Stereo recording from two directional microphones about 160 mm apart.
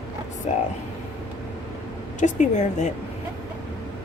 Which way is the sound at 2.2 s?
50° left (ahead or behind).